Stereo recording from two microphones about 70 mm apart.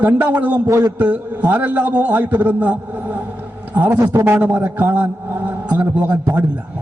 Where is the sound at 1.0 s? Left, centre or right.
Right.